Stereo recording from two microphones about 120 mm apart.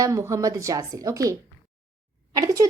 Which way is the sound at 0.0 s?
25° right (ahead or behind).